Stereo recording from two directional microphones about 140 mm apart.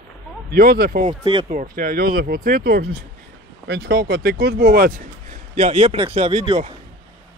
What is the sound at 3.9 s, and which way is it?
Speech, 90° right.